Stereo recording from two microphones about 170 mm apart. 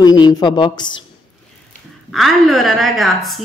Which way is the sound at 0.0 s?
25° left (ahead or behind).